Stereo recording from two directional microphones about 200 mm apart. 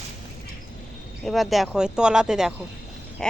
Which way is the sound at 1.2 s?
Centre (ahead or behind).